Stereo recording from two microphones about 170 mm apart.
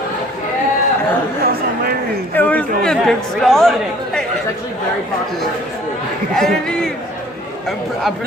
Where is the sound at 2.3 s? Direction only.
10° left (ahead or behind).